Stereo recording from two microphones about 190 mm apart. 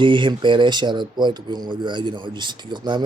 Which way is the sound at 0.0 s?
25° right (ahead or behind).